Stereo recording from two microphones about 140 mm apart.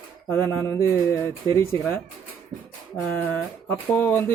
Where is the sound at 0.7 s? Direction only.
20° left (ahead or behind).